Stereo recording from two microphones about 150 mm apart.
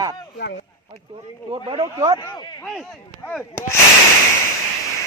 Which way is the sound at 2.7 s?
5° left (ahead or behind).